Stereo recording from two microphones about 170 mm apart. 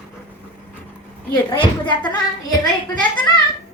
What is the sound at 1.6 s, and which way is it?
Speech, 25° left (ahead or behind).